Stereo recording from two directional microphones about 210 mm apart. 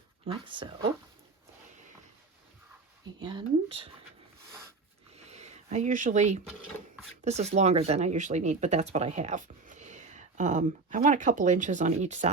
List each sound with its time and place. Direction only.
0.3 s speech: 25° right (ahead or behind)
3.2 s speech: 20° right (ahead or behind)
5.1 s a sound: 30° right (ahead or behind)
7.3 s speech: 30° right (ahead or behind)